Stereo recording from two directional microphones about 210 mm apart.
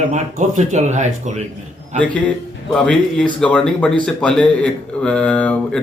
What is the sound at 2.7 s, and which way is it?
Speech, 5° left (ahead or behind).